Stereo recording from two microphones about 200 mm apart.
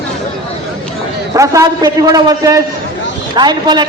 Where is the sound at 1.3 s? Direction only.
15° right (ahead or behind).